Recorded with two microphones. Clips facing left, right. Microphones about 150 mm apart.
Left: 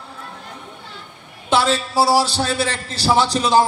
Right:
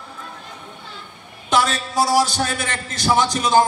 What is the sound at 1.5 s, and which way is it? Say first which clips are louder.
A man's voice: left 2 dB; 30° left (ahead or behind).